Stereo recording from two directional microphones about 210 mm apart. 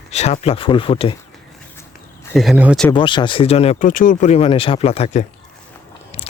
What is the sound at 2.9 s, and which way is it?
Speech, 20° left (ahead or behind).